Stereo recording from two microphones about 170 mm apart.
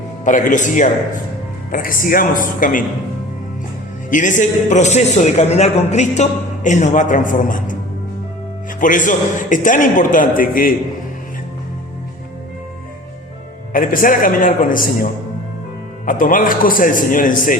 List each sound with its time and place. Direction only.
0.3 s a man's voice: 50° left (ahead or behind)
4.1 s a man's voice: 50° left (ahead or behind)
8.8 s a man's voice: 50° left (ahead or behind)
13.7 s a man's voice: 55° left (ahead or behind)
16.0 s a man's voice: 55° left (ahead or behind)